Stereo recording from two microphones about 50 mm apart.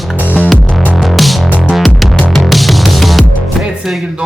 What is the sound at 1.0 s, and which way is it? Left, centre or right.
Music, centre.